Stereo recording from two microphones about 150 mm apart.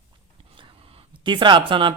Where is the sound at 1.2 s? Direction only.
30° right (ahead or behind).